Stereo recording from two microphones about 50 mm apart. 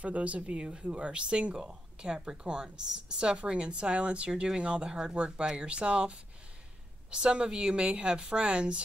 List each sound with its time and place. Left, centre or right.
0.0 s speech: right